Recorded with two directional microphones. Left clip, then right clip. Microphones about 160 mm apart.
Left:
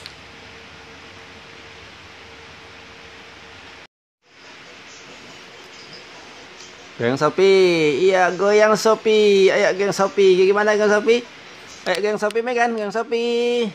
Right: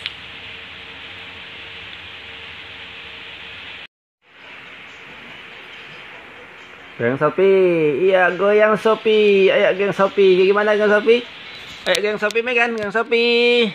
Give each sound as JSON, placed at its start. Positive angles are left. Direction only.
{"t": 7.0, "sound": "speech", "side_deg": 5}